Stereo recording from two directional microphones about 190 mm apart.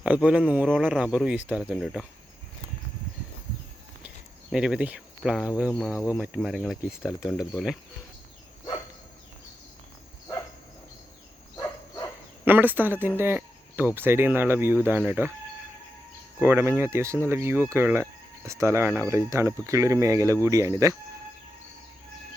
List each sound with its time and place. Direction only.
0.0 s speech: 5° right (ahead or behind)
4.5 s speech: 5° right (ahead or behind)
5.9 s speech: 15° left (ahead or behind)
6.1 s speech: 5° right (ahead or behind)
11.5 s a sound: 20° left (ahead or behind)
12.5 s speech: 10° right (ahead or behind)
16.4 s speech: 10° right (ahead or behind)